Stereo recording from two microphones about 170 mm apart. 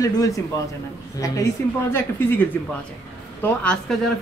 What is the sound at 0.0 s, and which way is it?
Speech, 20° left (ahead or behind).